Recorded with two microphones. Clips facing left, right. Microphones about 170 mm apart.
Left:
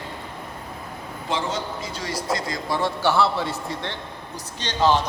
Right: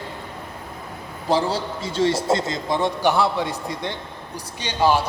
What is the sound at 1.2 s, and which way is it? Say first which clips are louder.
A man's voice: right 5 dB; 35° right (ahead or behind).